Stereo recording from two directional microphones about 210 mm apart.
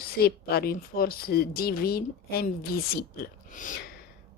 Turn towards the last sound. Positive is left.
turn(degrees=40)  # may be behind; listen again after turning